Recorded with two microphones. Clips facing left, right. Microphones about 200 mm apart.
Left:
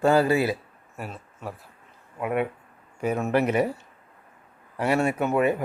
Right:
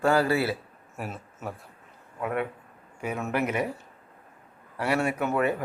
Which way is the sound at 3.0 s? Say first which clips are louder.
Left 5 dB; 40° left (ahead or behind).